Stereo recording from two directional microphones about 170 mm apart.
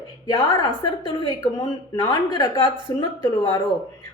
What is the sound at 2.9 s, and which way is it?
Speech, 15° left (ahead or behind).